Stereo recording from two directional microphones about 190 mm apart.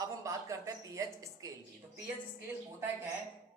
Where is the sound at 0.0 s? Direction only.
15° right (ahead or behind).